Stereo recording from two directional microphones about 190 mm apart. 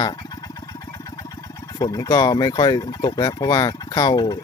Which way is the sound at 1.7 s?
20° left (ahead or behind).